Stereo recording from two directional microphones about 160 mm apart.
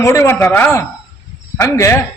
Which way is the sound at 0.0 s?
15° left (ahead or behind).